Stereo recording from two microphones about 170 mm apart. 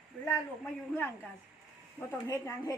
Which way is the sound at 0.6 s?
10° left (ahead or behind).